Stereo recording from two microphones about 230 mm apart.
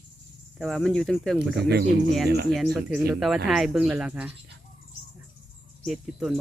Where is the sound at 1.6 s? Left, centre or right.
Right.